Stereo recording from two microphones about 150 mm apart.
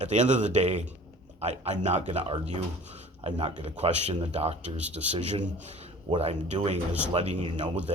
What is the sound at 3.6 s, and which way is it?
Speech, 45° right (ahead or behind).